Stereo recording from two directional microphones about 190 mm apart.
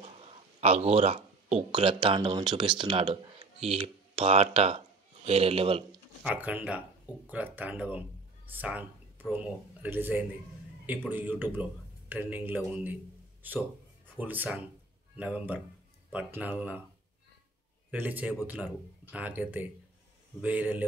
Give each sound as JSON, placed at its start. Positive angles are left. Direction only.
{"t": 0.0, "sound": "speech", "side_deg": -35}
{"t": 6.2, "sound": "a man's voice", "side_deg": -10}
{"t": 17.9, "sound": "speech", "side_deg": -10}